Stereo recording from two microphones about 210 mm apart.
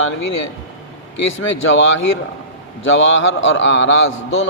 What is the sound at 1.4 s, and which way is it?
A man's voice, 65° left (ahead or behind).